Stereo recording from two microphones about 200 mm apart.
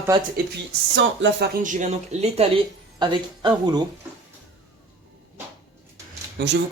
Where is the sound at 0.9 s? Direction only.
65° right (ahead or behind).